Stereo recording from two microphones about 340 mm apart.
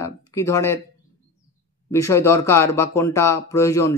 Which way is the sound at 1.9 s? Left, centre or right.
Centre.